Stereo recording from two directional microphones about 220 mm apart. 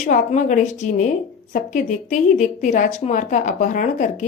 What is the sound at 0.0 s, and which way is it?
A woman's voice, 35° left (ahead or behind).